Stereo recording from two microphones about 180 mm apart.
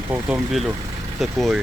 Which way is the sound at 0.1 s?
5° right (ahead or behind).